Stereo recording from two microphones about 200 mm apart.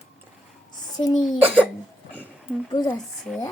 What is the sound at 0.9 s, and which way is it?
Speech, 20° left (ahead or behind).